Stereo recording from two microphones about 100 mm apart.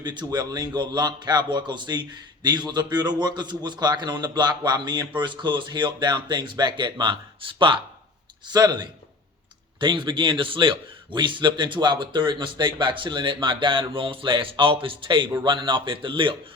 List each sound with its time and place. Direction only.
0.0 s a man's voice: 45° right (ahead or behind)
8.4 s a man's voice: 45° right (ahead or behind)